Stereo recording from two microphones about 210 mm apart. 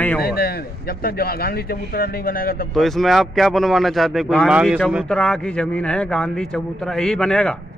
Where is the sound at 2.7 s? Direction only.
Centre (ahead or behind).